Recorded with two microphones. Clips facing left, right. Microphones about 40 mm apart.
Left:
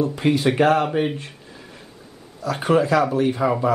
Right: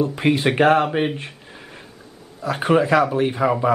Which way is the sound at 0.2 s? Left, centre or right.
Right.